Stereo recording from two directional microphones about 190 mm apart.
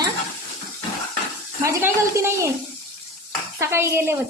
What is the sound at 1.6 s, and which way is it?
Speech, 15° right (ahead or behind).